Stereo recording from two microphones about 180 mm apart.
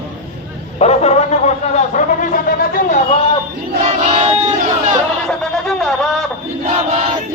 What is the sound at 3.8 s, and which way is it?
Child singing, 35° right (ahead or behind).